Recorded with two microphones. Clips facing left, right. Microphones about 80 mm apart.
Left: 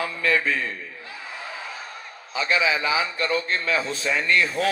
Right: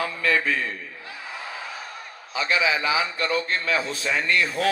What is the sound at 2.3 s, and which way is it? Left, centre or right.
Speech, left.